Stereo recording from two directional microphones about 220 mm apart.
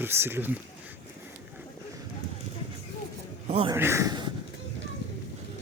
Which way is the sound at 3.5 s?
25° right (ahead or behind).